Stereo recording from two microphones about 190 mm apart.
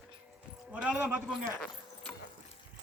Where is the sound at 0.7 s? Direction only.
5° right (ahead or behind).